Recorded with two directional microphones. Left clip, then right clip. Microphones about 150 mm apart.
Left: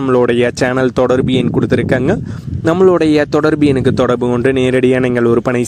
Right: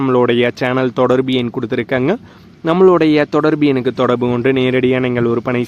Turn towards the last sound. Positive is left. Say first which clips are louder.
# left 4 dB
turn(degrees=40)  # may be behind; listen again after turning